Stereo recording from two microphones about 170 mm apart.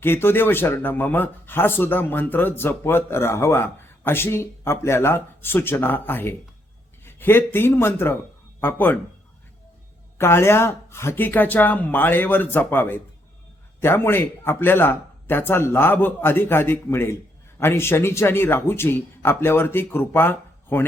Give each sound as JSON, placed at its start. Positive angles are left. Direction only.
{"t": 0.0, "sound": "a man's voice", "side_deg": 15}
{"t": 10.2, "sound": "speech", "side_deg": 15}